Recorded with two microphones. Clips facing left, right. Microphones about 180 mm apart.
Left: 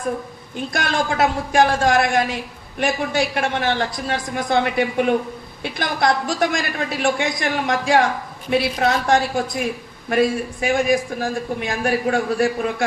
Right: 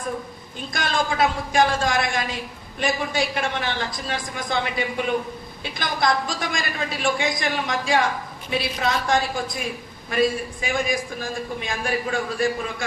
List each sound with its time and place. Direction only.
0.5 s a man's voice: 65° left (ahead or behind)